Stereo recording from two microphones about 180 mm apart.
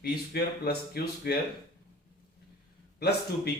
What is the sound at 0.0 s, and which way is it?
Speech, 60° left (ahead or behind).